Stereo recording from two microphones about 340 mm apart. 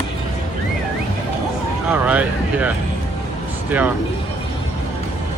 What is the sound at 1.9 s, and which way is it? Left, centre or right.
Speech, centre.